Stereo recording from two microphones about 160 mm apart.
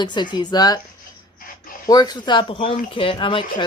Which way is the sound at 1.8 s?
25° left (ahead or behind).